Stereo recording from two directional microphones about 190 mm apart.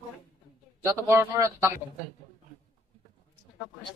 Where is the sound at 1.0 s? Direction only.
15° right (ahead or behind).